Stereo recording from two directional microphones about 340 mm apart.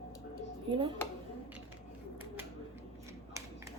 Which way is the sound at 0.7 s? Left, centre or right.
Centre.